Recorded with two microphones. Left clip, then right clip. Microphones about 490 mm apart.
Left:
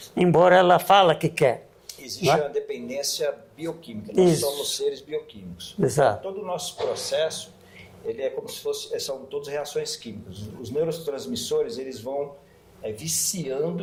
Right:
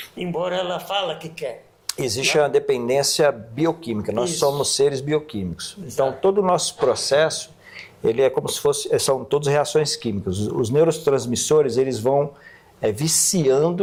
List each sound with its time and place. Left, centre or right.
0.2 s speech: left
1.9 s speech: right